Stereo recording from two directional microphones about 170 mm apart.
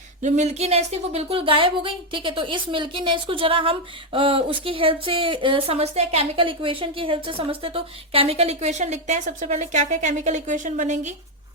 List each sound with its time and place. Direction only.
0.2 s speech: 40° right (ahead or behind)